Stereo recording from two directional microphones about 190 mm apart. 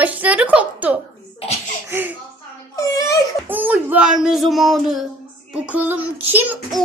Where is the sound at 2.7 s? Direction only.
20° left (ahead or behind).